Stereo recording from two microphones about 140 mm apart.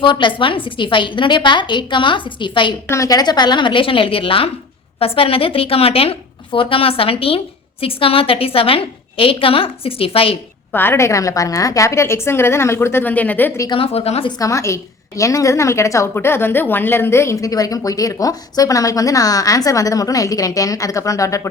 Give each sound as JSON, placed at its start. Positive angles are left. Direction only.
{"t": 0.0, "sound": "a woman's voice", "side_deg": 35}
{"t": 2.9, "sound": "a woman's voice", "side_deg": 25}
{"t": 10.7, "sound": "a woman's voice", "side_deg": 15}
{"t": 13.7, "sound": "speech", "side_deg": 40}
{"t": 14.3, "sound": "a woman's voice", "side_deg": 25}